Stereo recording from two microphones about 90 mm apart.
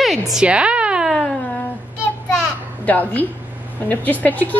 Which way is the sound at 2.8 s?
20° left (ahead or behind).